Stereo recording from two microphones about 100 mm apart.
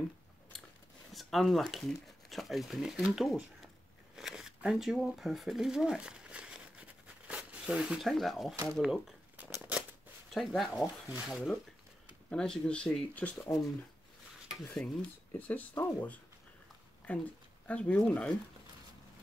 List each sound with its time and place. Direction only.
1.1 s speech: centre (ahead or behind)
7.2 s zipper: 10° right (ahead or behind)
8.1 s speech: centre (ahead or behind)
10.3 s speech: centre (ahead or behind)
12.3 s speech: 10° left (ahead or behind)
14.7 s speech: 10° left (ahead or behind)